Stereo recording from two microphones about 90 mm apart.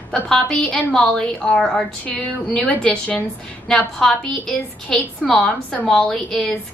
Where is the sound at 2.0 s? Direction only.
15° left (ahead or behind).